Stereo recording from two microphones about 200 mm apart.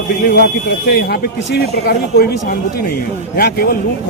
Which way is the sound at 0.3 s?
55° left (ahead or behind).